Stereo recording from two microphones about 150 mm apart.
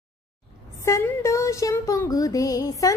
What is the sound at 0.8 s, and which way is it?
Music, 20° left (ahead or behind).